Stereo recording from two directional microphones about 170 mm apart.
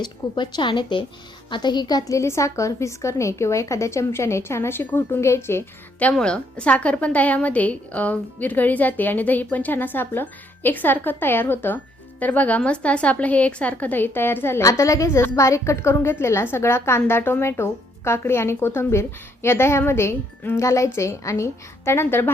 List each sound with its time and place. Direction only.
0.0 s a woman's voice: 25° left (ahead or behind)